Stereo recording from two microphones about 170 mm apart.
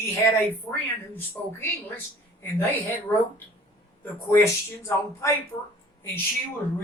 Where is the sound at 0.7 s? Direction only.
10° left (ahead or behind).